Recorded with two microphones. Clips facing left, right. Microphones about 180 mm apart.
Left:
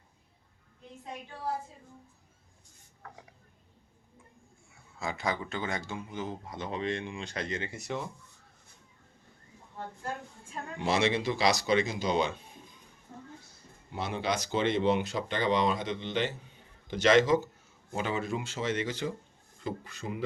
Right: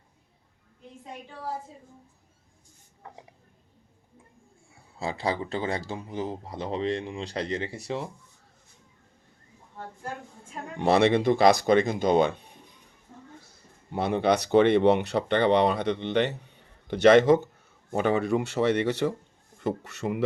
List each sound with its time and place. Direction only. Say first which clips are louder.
3.0 s speech: right 3 dB; 25° right (ahead or behind)
4.7 s speech: right 4 dB; 30° right (ahead or behind)
10.8 s speech: right 7 dB; 60° right (ahead or behind)
13.9 s speech: right 8 dB; 60° right (ahead or behind)